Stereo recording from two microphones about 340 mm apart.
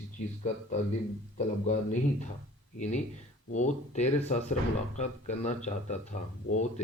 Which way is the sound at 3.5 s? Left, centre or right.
Left.